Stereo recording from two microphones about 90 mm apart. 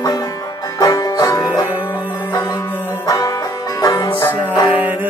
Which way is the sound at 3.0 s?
40° left (ahead or behind).